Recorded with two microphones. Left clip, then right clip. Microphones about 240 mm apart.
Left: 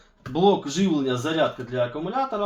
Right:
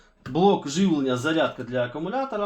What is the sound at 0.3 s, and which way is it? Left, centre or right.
Speech, right.